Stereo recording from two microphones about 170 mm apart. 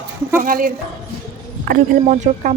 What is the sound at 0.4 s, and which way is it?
Speech, 55° right (ahead or behind).